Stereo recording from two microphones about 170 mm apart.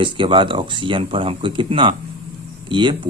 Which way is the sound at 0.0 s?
30° right (ahead or behind).